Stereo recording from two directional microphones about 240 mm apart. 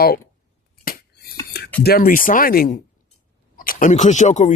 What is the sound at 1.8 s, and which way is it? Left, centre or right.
Speech, left.